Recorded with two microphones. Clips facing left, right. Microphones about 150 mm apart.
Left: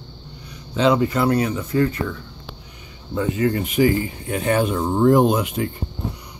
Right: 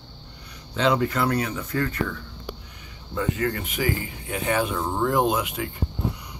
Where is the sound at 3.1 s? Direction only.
20° left (ahead or behind).